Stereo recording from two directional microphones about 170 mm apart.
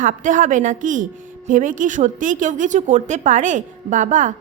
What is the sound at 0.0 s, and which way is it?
Speech, 50° right (ahead or behind).